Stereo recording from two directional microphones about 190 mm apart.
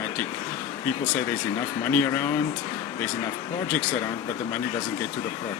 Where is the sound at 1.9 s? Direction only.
10° left (ahead or behind).